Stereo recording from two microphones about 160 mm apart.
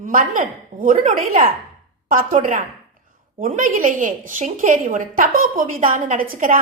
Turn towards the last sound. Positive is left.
turn(degrees=-60)  # may be behind; listen again after turning